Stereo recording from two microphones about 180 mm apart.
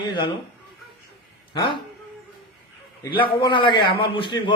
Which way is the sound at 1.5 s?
25° left (ahead or behind).